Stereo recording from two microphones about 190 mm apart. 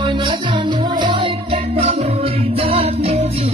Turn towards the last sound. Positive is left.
turn(degrees=-30)  # may be behind; listen again after turning